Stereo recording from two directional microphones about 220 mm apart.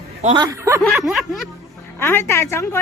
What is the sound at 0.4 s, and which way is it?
Speech, 10° right (ahead or behind).